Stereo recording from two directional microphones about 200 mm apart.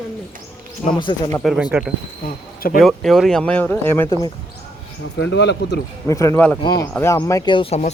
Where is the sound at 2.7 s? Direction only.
Centre (ahead or behind); by 4.3 s 20° left (ahead or behind).